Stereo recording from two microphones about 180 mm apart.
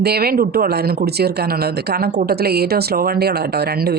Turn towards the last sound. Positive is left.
turn(degrees=-65)  # may be behind; listen again after turning